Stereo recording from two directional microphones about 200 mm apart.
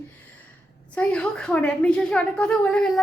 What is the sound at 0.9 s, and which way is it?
A woman's voice, 5° left (ahead or behind).